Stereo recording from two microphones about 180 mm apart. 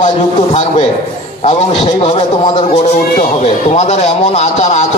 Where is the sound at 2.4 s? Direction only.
40° left (ahead or behind).